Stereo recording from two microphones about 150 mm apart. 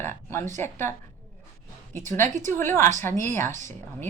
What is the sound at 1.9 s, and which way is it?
Speech, 55° right (ahead or behind).